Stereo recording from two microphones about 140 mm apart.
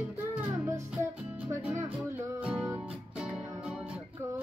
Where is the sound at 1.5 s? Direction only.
15° right (ahead or behind).